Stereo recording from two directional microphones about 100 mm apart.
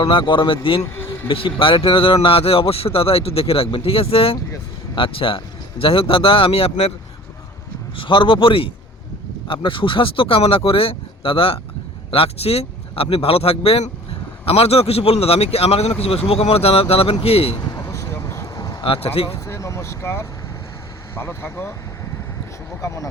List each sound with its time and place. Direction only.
0.0 s speech: 55° left (ahead or behind); by 6.9 s 80° left
7.9 s speech: 55° left (ahead or behind); by 17.6 s 75° left (ahead or behind)
17.6 s vehicle: 35° left (ahead or behind)
18.8 s speech: 70° left (ahead or behind)
19.3 s vehicle: 30° left (ahead or behind)
21.2 s speech: 25° left (ahead or behind)